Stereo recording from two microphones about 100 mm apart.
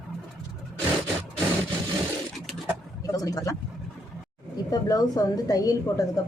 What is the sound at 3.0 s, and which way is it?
Speech, 35° left (ahead or behind).